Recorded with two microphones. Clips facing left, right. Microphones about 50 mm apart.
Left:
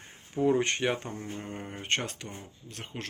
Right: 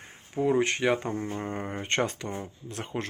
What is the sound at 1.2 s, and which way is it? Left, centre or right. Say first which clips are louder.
Mantra: right 6 dB; right.